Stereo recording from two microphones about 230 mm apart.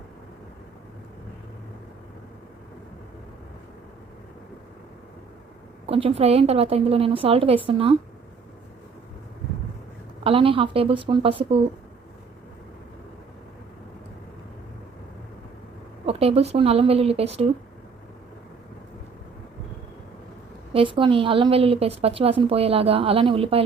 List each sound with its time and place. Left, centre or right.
5.8 s a woman's voice: right
10.2 s a woman's voice: right
16.0 s a woman's voice: right
20.7 s a woman's voice: right